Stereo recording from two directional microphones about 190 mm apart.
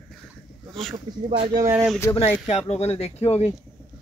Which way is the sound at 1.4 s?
20° right (ahead or behind).